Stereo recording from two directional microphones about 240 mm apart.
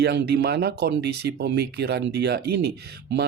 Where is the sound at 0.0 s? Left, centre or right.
Right.